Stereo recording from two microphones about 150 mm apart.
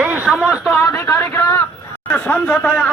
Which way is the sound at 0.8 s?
20° left (ahead or behind).